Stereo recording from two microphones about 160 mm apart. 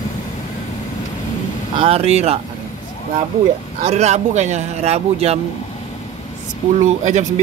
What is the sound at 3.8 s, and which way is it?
A man's voice, 45° right (ahead or behind).